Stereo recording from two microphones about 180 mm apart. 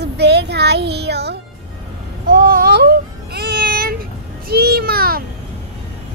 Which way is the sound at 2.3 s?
55° right (ahead or behind).